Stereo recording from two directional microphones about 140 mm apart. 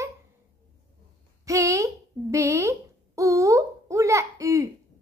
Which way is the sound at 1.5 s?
20° right (ahead or behind).